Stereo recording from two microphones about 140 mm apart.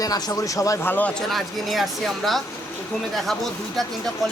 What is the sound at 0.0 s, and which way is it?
A man's voice, 25° left (ahead or behind).